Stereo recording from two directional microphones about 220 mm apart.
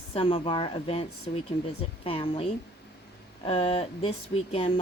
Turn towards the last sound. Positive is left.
turn(degrees=25)  # may be behind; listen again after turning